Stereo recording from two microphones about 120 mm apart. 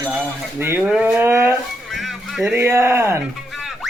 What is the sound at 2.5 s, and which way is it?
Speech, 20° right (ahead or behind).